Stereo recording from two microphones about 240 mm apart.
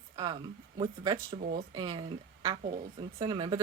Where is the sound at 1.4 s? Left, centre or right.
Right.